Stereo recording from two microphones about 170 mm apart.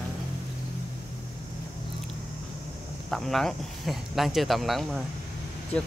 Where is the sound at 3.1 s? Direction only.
Centre (ahead or behind).